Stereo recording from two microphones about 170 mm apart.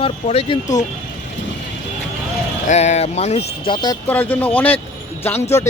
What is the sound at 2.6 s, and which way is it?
Speech, 40° left (ahead or behind).